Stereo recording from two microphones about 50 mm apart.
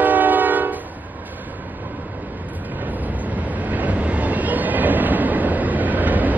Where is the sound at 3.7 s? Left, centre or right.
Right.